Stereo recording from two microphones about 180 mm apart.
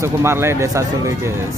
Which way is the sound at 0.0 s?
15° right (ahead or behind).